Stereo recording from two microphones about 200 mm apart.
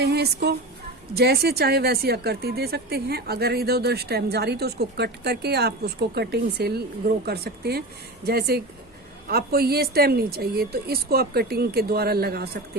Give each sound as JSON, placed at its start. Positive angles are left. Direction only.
{"t": 0.0, "sound": "speech", "side_deg": -55}